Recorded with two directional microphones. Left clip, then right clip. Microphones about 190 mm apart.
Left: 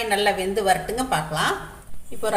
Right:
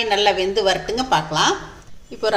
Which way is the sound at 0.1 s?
30° right (ahead or behind).